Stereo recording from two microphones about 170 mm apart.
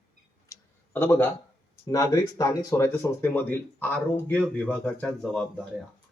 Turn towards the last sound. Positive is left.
turn(degrees=5)  # may be behind; listen again after turning